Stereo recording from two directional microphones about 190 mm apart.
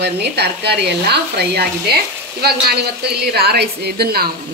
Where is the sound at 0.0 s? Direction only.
60° right (ahead or behind).